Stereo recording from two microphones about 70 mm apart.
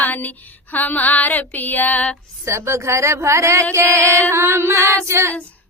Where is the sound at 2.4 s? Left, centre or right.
Right.